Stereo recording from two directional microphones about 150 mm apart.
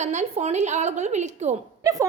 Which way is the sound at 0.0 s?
50° right (ahead or behind).